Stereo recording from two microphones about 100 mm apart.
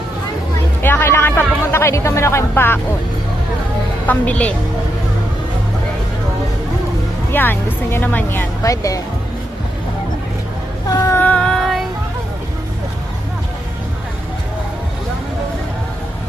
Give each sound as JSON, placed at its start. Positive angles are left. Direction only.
{"t": 0.8, "sound": "speech", "side_deg": 25}
{"t": 4.0, "sound": "speech", "side_deg": 15}
{"t": 7.3, "sound": "speech", "side_deg": 20}
{"t": 8.6, "sound": "speech", "side_deg": 35}
{"t": 10.8, "sound": "a sound", "side_deg": 35}
{"t": 11.2, "sound": "music", "side_deg": 10}